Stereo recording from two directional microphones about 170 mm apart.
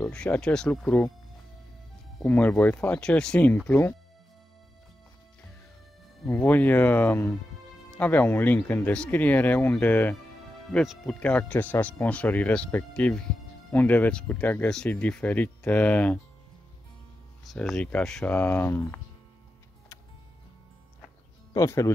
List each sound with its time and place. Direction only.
0.1 s speech: 5° left (ahead or behind)
2.2 s speech: 10° left (ahead or behind)
6.3 s speech: 10° left (ahead or behind)
17.5 s speech: centre (ahead or behind)
21.5 s speech: 15° left (ahead or behind)